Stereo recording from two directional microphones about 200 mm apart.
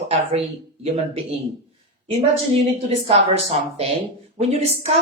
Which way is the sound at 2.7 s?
30° right (ahead or behind).